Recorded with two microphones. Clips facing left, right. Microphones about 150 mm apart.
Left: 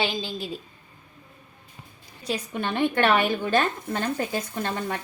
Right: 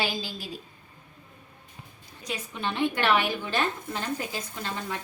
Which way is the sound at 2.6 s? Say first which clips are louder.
Left 3 dB; 55° left (ahead or behind).